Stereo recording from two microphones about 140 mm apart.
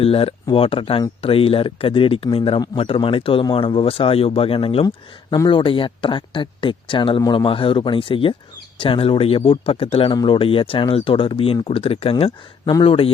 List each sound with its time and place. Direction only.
0.0 s speech: 40° left (ahead or behind)